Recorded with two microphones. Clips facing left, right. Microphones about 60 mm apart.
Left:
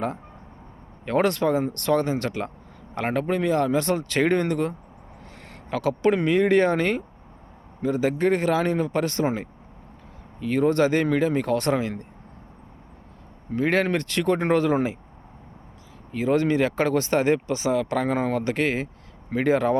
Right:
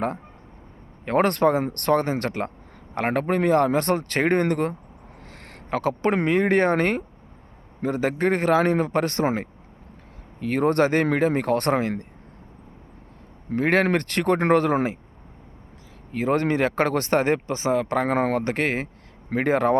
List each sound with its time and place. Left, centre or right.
1.0 s speech: right
5.7 s speech: right
13.5 s speech: right
16.1 s speech: right